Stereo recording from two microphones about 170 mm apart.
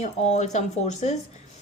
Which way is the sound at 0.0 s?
40° left (ahead or behind).